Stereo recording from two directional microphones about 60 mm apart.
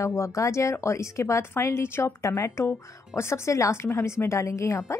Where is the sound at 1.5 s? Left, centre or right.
Left.